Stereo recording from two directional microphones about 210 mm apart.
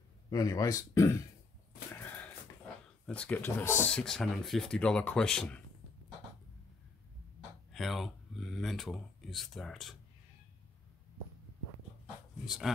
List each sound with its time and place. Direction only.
0.3 s speech: 15° left (ahead or behind)
2.0 s wheeze: 10° left (ahead or behind)
3.1 s speech: 5° left (ahead or behind)
7.7 s speech: centre (ahead or behind)
12.4 s speech: centre (ahead or behind)